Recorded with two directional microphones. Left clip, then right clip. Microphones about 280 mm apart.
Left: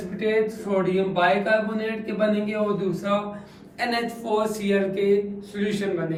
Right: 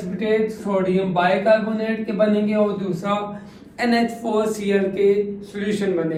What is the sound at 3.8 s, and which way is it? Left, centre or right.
A man's voice, right.